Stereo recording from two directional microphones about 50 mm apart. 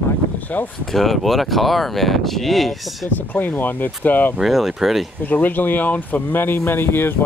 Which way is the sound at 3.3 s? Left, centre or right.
Left.